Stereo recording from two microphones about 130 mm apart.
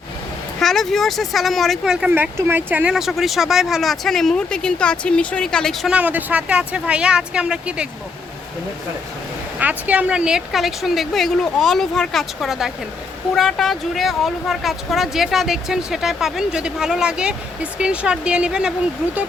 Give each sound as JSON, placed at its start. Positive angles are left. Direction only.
{"t": 0.6, "sound": "speech", "side_deg": 5}
{"t": 2.0, "sound": "speech", "side_deg": -15}
{"t": 2.9, "sound": "speech", "side_deg": 0}
{"t": 6.0, "sound": "speech", "side_deg": -15}
{"t": 9.6, "sound": "speech", "side_deg": -10}